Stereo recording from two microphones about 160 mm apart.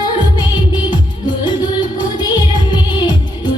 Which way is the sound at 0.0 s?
30° left (ahead or behind).